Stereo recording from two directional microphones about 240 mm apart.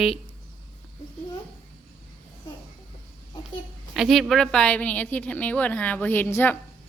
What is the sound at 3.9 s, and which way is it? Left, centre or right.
A woman's voice, centre.